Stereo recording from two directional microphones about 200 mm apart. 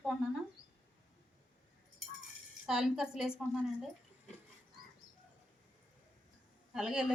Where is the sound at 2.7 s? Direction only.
Centre (ahead or behind).